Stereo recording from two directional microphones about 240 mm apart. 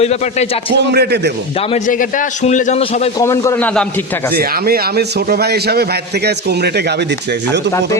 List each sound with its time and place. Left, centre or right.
0.0 s a man's voice: left
0.9 s a man's voice: right
1.7 s a man's voice: left
3.2 s a man's voice: centre
4.4 s a man's voice: right